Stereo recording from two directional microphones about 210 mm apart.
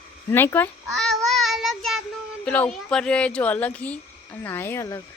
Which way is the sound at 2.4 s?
5° left (ahead or behind).